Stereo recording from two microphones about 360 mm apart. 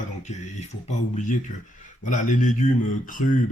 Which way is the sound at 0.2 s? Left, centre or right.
Centre.